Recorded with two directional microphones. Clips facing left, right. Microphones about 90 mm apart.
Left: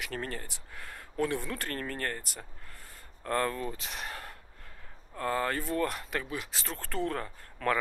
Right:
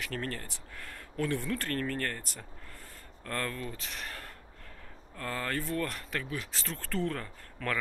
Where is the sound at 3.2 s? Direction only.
20° left (ahead or behind).